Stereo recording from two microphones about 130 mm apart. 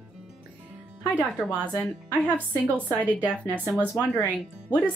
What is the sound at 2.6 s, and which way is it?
A woman's voice, 10° left (ahead or behind).